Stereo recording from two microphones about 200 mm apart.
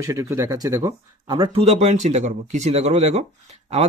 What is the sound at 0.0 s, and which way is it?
Speech, 15° right (ahead or behind).